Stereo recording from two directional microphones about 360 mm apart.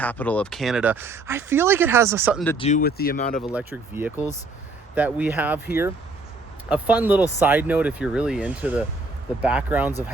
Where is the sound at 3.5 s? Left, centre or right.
Centre.